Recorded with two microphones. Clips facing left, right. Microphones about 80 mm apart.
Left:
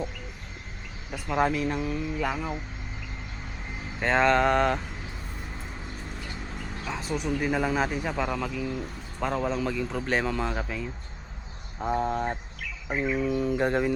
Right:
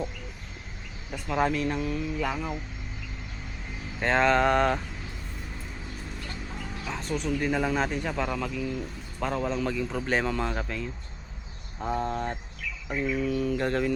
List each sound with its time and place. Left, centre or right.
1.3 s a man's voice: centre
4.0 s a man's voice: centre
6.8 s a man's voice: centre
12.9 s bird: left
13.1 s speech: centre